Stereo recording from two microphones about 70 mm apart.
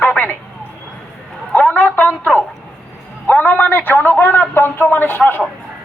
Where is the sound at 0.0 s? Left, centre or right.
Left.